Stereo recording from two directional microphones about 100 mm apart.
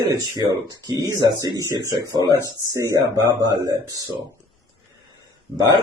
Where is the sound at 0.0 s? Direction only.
40° right (ahead or behind).